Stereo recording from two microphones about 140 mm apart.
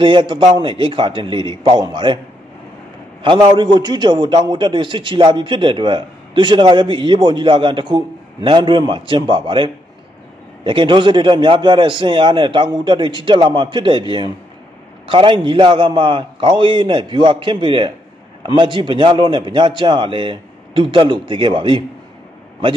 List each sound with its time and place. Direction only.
0.0 s a man's voice: 35° right (ahead or behind)
3.2 s a man's voice: 35° right (ahead or behind)